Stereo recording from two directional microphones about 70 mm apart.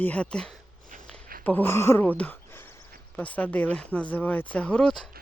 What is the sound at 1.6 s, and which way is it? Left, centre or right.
Speech, left.